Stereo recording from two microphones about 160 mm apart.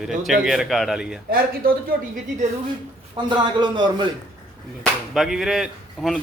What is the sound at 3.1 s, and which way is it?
Speech, 30° right (ahead or behind).